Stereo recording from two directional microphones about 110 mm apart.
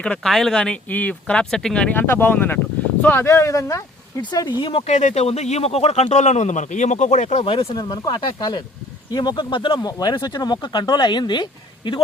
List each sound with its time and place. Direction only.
0.0 s speech: 5° left (ahead or behind)
3.2 s speech: 25° left (ahead or behind); by 4.8 s 50° left (ahead or behind)
4.8 s speech: 90° left
7.4 s speech: 55° left (ahead or behind)
7.8 s speech: 40° left (ahead or behind)